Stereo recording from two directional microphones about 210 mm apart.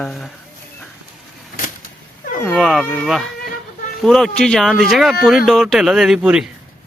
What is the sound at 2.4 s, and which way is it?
Speech, centre (ahead or behind).